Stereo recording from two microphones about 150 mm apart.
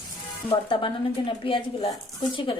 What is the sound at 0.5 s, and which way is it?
A woman's voice, 35° left (ahead or behind).